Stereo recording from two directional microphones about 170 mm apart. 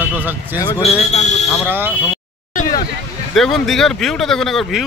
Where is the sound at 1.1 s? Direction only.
40° left (ahead or behind).